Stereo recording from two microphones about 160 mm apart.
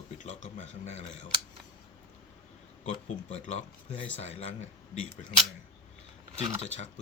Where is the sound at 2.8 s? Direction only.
50° left (ahead or behind).